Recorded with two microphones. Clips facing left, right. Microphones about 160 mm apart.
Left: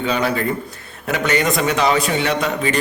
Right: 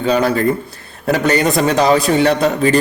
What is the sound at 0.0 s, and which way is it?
A man's voice, 35° right (ahead or behind).